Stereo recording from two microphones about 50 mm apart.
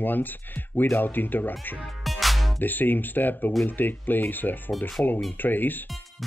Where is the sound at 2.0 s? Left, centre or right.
Centre.